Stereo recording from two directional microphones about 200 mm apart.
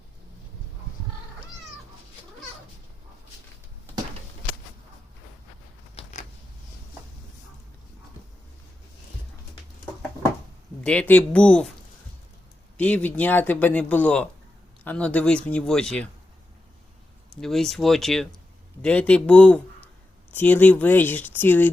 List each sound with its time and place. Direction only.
5.9 s creak: 30° left (ahead or behind)
10.8 s speech: 5° left (ahead or behind)
12.7 s speech: 5° left (ahead or behind)
17.4 s speech: centre (ahead or behind)